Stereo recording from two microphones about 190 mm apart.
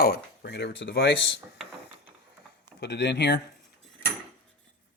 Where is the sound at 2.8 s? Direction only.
65° left (ahead or behind).